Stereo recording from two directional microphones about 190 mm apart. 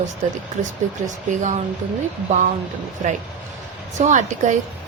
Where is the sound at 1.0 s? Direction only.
40° right (ahead or behind).